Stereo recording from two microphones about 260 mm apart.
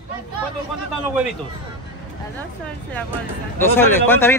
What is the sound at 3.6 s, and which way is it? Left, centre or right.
Speech, centre.